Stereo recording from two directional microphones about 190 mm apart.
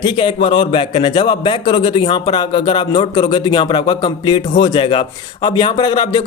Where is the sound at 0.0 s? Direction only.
25° left (ahead or behind).